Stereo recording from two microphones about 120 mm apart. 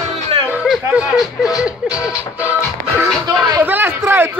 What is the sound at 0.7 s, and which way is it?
Speech, centre (ahead or behind).